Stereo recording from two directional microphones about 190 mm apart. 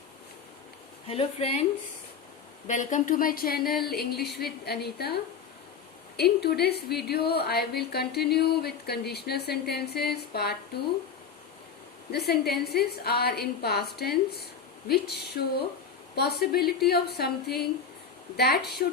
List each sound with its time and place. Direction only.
1.0 s speech: 30° left (ahead or behind)
2.6 s a woman's voice: 40° left (ahead or behind)
12.1 s a woman's voice: 60° left (ahead or behind)